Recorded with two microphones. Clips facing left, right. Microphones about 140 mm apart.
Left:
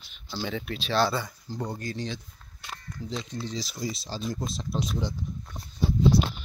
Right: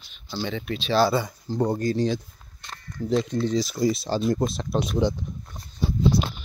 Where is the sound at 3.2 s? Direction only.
55° right (ahead or behind).